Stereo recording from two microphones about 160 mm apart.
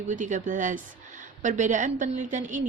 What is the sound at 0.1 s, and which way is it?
Speech, 50° right (ahead or behind).